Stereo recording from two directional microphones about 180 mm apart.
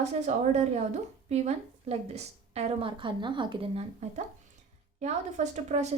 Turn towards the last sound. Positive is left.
turn(degrees=-40)  # may be behind; listen again after turning